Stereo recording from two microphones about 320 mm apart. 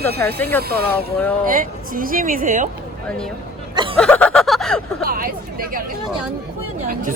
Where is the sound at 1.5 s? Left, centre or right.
Right.